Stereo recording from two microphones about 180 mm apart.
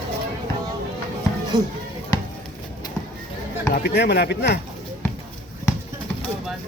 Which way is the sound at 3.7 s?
65° left (ahead or behind).